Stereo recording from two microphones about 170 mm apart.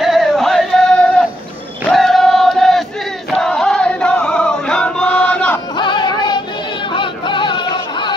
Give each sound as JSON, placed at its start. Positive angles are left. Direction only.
{"t": 0.0, "sound": "music", "side_deg": 0}
{"t": 1.9, "sound": "choir", "side_deg": 0}
{"t": 3.3, "sound": "music", "side_deg": 5}
{"t": 5.8, "sound": "music", "side_deg": 25}